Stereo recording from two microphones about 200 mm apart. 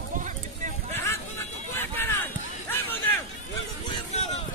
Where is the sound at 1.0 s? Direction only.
10° left (ahead or behind).